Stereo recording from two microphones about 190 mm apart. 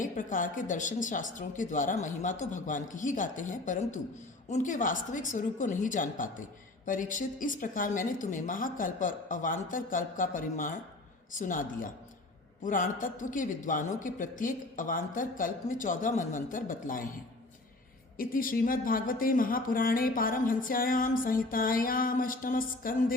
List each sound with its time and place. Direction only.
0.0 s speech: 45° left (ahead or behind)
18.2 s speech: 50° left (ahead or behind)